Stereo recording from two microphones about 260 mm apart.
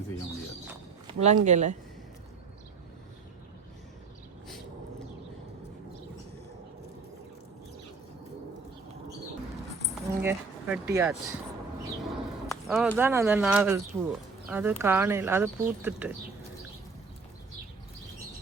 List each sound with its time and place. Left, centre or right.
1.0 s speech: right
10.2 s speech: centre